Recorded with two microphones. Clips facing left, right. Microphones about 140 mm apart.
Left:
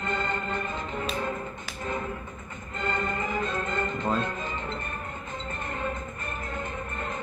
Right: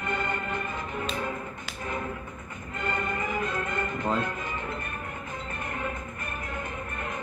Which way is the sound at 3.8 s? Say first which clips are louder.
Even; 15° right (ahead or behind).